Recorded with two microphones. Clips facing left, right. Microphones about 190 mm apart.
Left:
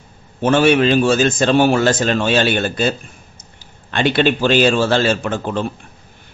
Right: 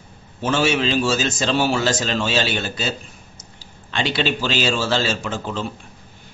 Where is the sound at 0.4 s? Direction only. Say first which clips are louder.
Left 7 dB; 55° left (ahead or behind).